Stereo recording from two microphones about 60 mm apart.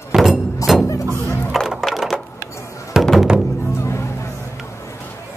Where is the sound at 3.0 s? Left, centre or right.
Centre.